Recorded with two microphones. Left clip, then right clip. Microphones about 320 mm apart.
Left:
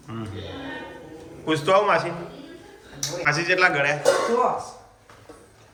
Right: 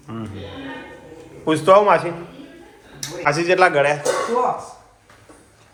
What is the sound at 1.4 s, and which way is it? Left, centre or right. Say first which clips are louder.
Speech: right 6 dB; centre.